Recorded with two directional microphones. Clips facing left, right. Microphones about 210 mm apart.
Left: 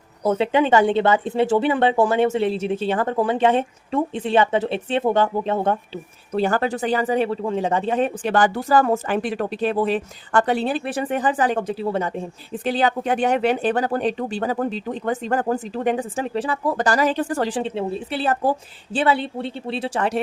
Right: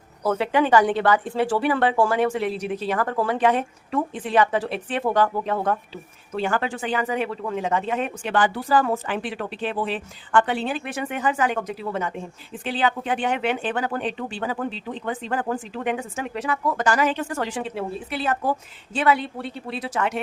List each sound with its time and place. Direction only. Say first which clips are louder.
0.2 s speech: left 3 dB; 20° left (ahead or behind)